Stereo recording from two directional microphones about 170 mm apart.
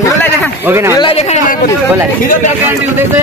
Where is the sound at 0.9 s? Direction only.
35° left (ahead or behind).